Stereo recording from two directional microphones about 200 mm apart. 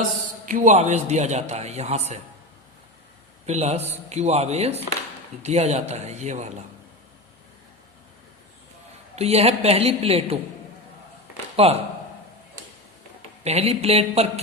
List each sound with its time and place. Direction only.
0.4 s a man's voice: 40° right (ahead or behind)
3.4 s a man's voice: 35° right (ahead or behind)
9.1 s a man's voice: 30° right (ahead or behind)
11.5 s speech: 30° right (ahead or behind)
13.4 s a man's voice: 30° right (ahead or behind)